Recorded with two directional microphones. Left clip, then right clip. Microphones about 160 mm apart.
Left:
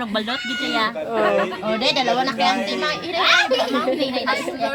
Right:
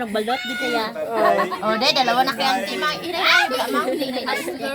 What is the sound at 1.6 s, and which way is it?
Speech, 25° right (ahead or behind).